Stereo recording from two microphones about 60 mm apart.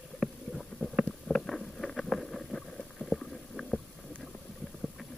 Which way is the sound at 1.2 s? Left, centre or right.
Centre.